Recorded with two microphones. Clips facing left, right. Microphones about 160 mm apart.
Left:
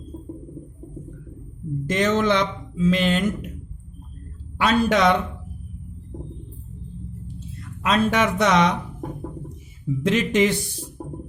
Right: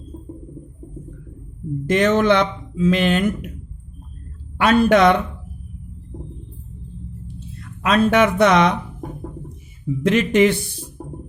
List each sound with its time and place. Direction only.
1.9 s speech: 60° right (ahead or behind)
4.5 s speech: 55° right (ahead or behind)
7.3 s speech: 60° right (ahead or behind)
10.0 s speech: 60° right (ahead or behind)